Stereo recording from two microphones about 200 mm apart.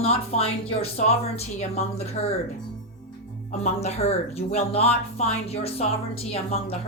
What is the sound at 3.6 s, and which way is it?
A woman's voice, 30° left (ahead or behind).